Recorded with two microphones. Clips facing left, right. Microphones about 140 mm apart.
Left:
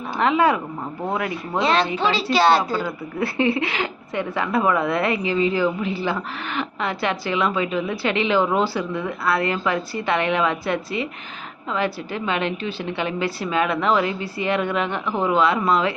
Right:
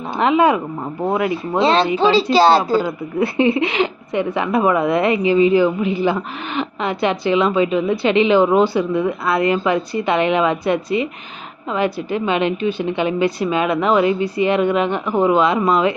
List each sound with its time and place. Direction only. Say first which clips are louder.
0.2 s a woman's voice: right 4 dB; 20° right (ahead or behind)